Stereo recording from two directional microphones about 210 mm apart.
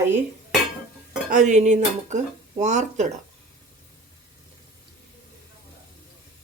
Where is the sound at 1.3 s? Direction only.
35° right (ahead or behind).